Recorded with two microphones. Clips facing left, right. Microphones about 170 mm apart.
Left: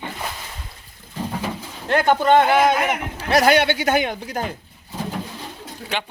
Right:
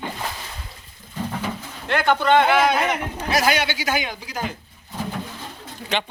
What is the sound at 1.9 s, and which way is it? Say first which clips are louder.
Speech: left 2 dB; 40° left (ahead or behind).